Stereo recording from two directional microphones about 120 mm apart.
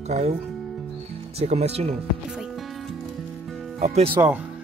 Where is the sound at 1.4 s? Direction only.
60° right (ahead or behind).